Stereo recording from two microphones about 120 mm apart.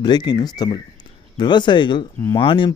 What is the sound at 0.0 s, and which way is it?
Speech, 35° left (ahead or behind).